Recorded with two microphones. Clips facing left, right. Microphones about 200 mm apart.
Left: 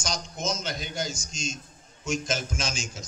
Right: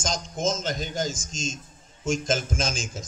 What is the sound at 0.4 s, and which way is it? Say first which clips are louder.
A man's voice: right 6 dB; 45° right (ahead or behind).